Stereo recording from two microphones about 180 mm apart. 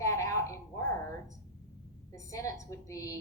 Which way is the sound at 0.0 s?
15° left (ahead or behind).